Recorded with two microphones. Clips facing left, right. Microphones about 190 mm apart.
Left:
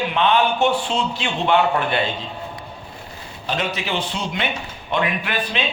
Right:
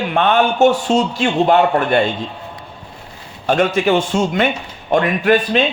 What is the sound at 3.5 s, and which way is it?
A man's voice, 50° right (ahead or behind).